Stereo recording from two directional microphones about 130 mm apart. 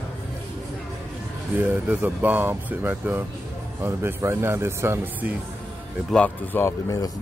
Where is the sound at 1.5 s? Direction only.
15° right (ahead or behind).